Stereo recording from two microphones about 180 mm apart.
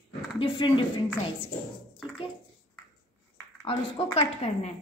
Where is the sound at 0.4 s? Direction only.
25° left (ahead or behind).